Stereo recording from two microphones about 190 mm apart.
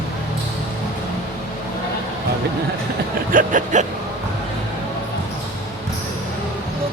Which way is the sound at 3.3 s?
45° right (ahead or behind).